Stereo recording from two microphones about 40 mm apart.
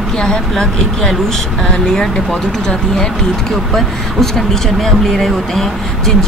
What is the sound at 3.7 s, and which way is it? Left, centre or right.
Speech, centre.